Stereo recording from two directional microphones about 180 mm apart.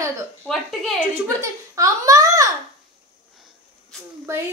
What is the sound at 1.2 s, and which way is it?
A woman's voice, 15° right (ahead or behind).